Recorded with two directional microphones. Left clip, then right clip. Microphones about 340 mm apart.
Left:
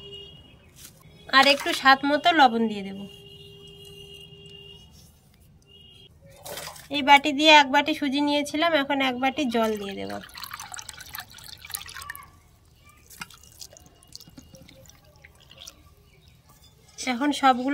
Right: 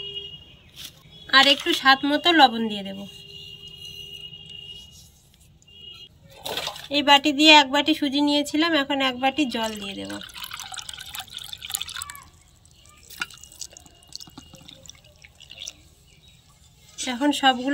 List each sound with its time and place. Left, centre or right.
1.3 s a woman's voice: centre
6.9 s speech: centre
13.6 s drip: centre
14.1 s water: centre
15.3 s drip: centre
17.1 s a woman's voice: centre